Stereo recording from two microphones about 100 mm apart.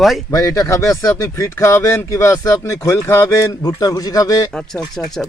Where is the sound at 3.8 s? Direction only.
40° left (ahead or behind).